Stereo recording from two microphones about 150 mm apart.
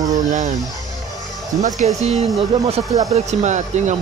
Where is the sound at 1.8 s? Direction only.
45° right (ahead or behind).